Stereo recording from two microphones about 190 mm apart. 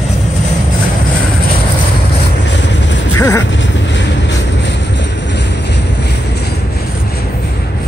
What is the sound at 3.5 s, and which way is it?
Vehicle, 70° left (ahead or behind).